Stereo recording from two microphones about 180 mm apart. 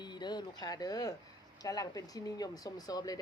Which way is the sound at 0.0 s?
25° left (ahead or behind).